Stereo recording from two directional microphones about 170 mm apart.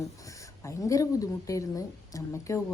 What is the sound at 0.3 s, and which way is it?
Speech, 20° left (ahead or behind).